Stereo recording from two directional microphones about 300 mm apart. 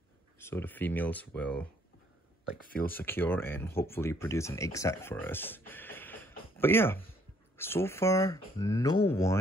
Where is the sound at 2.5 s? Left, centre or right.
Left.